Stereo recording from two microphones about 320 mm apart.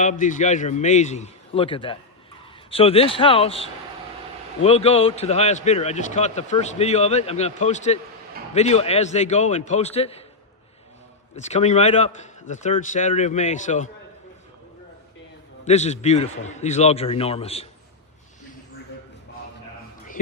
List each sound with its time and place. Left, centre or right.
0.0 s speech: left
11.3 s speech: left
15.6 s speech: centre